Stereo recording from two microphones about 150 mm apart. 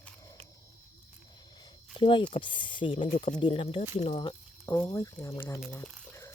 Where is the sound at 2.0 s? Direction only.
35° left (ahead or behind).